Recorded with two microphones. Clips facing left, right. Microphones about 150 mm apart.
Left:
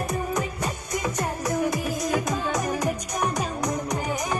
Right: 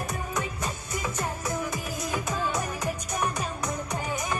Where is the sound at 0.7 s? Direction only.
40° left (ahead or behind).